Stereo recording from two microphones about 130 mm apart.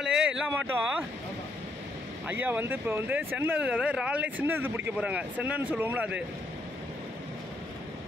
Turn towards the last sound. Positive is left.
turn(degrees=-10)  # may be behind; listen again after turning